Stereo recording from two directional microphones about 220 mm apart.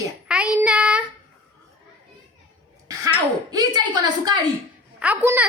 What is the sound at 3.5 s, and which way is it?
Speech, 20° right (ahead or behind).